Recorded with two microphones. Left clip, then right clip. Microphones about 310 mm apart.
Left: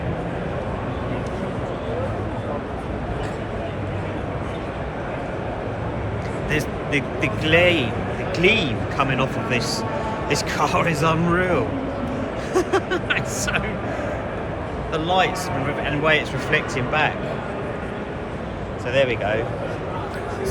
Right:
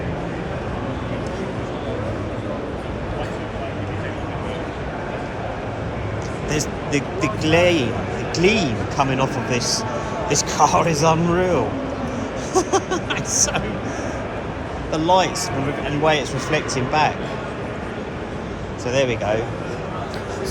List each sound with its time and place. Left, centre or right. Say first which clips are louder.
6.5 s a man's voice: even; centre
12.5 s a sound: right 1 dB; centre
14.9 s a man's voice: right 3 dB; centre
18.9 s speech: even; centre